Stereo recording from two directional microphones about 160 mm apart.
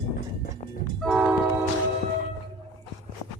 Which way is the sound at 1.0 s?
5° right (ahead or behind).